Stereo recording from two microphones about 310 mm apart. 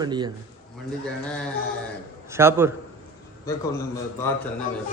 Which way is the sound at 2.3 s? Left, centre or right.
Centre.